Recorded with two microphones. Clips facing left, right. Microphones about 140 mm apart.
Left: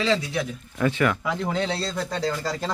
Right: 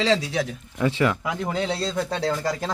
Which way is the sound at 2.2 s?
65° right (ahead or behind).